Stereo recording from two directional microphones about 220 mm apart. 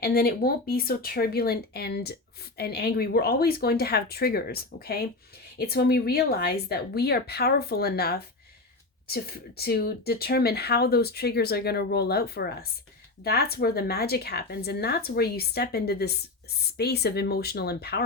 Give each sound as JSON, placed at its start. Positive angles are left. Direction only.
{"t": 0.0, "sound": "speech", "side_deg": 45}